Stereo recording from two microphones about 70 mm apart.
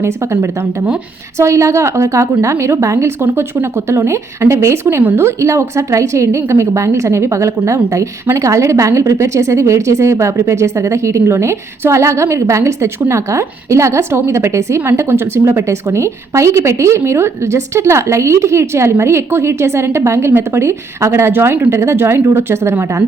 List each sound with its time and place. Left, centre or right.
1.4 s speech: right
3.2 s a woman's voice: right